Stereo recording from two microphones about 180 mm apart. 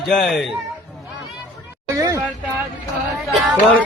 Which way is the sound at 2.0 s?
15° right (ahead or behind).